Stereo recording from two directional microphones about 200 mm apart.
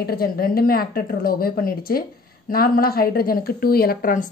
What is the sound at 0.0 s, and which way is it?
A woman's voice, 50° left (ahead or behind).